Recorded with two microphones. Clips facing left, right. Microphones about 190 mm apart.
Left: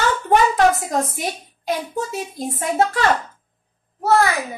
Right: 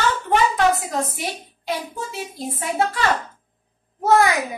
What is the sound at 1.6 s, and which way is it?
A woman's voice, 45° left (ahead or behind).